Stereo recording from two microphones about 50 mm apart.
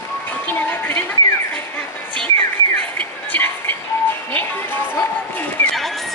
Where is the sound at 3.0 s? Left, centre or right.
Left.